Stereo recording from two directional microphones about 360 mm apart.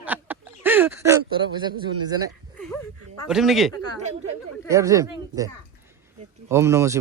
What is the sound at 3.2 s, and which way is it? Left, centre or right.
Speech, centre.